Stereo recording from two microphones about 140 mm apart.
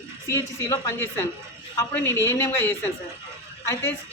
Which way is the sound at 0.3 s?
20° left (ahead or behind).